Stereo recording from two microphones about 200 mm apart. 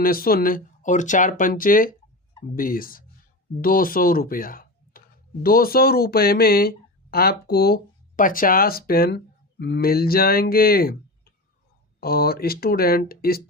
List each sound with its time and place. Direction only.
0.0 s speech: 45° left (ahead or behind)
11.9 s speech: 50° left (ahead or behind)